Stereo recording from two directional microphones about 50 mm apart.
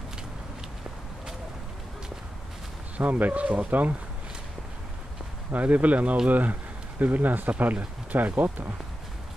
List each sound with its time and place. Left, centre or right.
3.0 s speech: right
5.5 s speech: right